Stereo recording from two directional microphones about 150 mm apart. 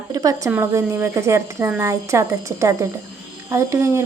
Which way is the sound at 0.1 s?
20° right (ahead or behind).